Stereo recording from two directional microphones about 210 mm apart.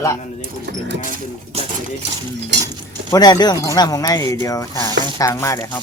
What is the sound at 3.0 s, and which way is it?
Speech, 20° left (ahead or behind).